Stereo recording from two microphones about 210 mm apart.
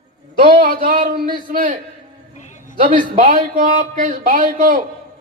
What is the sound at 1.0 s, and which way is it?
Speech, 40° right (ahead or behind).